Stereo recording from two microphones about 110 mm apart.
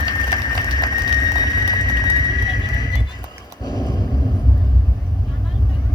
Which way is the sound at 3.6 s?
35° left (ahead or behind).